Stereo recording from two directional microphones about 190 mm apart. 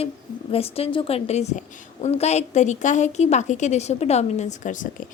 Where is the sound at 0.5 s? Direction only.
30° left (ahead or behind).